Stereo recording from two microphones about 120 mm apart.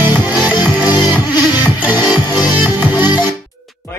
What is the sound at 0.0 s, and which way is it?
Music, 15° right (ahead or behind).